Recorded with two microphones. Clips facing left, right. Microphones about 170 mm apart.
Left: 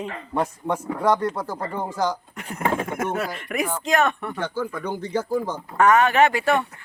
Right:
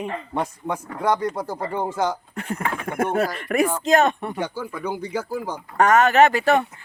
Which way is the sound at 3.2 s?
45° right (ahead or behind).